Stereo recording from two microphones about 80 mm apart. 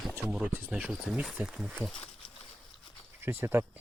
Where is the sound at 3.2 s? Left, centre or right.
Right.